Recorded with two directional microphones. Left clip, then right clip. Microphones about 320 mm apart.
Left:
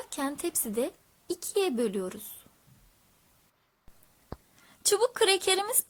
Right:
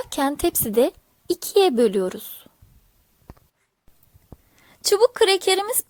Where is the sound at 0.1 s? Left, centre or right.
Right.